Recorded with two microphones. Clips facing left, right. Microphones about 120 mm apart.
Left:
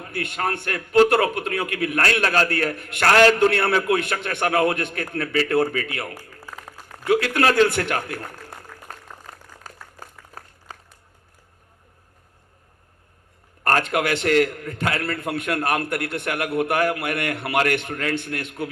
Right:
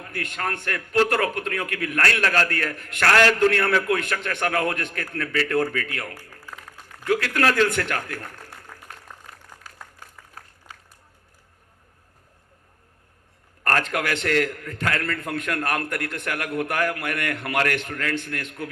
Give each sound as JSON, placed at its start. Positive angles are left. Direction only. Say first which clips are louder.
{"t": 0.2, "sound": "a man's voice", "louder": "left 3 dB", "side_deg": 25}
{"t": 6.1, "sound": "a sound", "louder": "left 2 dB", "side_deg": 40}
{"t": 7.1, "sound": "a man's voice", "louder": "left 3 dB", "side_deg": 25}
{"t": 8.1, "sound": "a sound", "louder": "left 3 dB", "side_deg": 30}
{"t": 10.0, "sound": "applause", "louder": "left 4 dB", "side_deg": 40}
{"t": 13.7, "sound": "a man's voice", "louder": "left 3 dB", "side_deg": 20}